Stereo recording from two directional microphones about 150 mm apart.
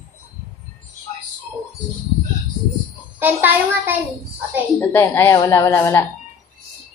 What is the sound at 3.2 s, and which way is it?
Speech, 10° right (ahead or behind).